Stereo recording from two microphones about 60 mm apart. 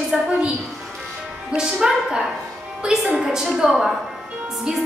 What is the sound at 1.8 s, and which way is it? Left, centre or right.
A woman's voice, centre.